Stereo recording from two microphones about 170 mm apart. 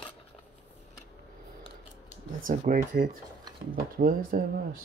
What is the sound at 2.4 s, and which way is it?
Speech, 55° right (ahead or behind).